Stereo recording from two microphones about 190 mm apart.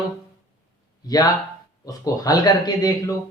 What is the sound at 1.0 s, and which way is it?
Speech, 20° left (ahead or behind).